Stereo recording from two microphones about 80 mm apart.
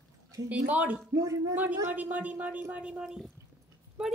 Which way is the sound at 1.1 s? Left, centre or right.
Right.